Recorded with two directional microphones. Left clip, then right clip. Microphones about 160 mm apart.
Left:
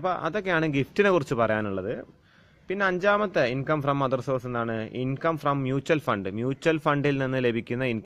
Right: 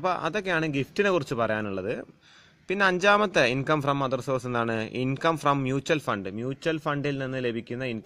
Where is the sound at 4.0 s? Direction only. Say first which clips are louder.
Left 1 dB; centre (ahead or behind).